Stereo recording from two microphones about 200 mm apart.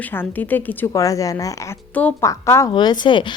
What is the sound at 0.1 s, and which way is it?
A woman's voice, 10° left (ahead or behind).